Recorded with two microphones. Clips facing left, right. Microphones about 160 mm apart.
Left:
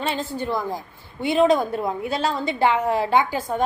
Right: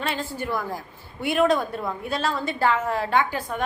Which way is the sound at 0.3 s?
20° left (ahead or behind).